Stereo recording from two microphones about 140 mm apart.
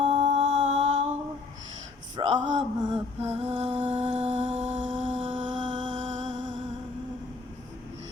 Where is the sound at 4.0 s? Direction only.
55° right (ahead or behind).